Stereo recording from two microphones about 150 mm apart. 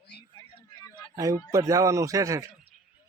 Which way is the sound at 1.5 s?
20° right (ahead or behind).